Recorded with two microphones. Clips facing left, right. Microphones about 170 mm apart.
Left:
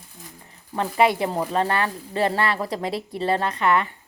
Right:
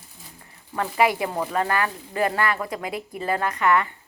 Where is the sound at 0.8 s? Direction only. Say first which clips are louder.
Left 2 dB; 25° left (ahead or behind).